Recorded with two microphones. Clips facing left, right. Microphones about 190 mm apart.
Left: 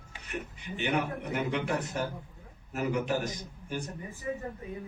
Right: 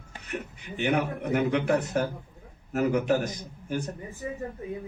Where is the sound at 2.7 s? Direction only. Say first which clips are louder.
Right 6 dB; 50° right (ahead or behind).